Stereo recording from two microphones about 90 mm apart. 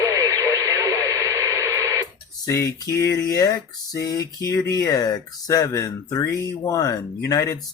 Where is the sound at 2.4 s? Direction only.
40° left (ahead or behind).